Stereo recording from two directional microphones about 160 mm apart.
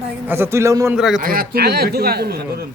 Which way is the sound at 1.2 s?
65° right (ahead or behind).